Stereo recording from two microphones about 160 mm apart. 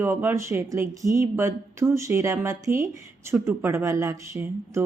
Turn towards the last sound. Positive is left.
turn(degrees=-15)  # may be behind; listen again after turning